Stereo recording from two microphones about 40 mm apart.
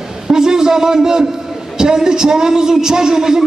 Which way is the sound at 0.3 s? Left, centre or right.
Centre.